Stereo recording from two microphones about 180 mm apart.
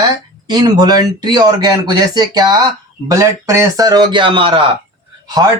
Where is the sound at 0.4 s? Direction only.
25° right (ahead or behind).